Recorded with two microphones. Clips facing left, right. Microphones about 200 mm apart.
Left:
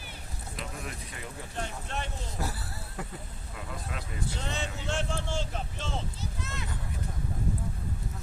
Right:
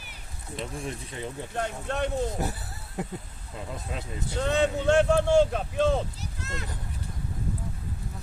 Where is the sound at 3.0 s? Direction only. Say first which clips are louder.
Right 7 dB; 20° right (ahead or behind).